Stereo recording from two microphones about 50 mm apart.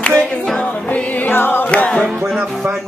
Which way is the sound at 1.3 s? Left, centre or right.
Left.